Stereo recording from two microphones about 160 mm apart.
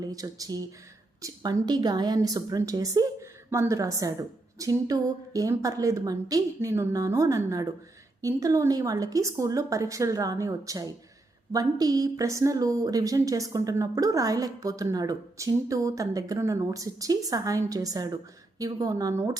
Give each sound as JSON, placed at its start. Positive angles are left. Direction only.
{"t": 0.0, "sound": "a woman's voice", "side_deg": -20}